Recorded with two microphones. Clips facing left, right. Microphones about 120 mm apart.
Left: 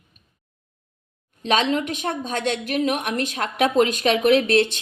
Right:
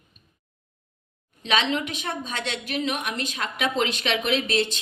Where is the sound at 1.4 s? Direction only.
45° left (ahead or behind).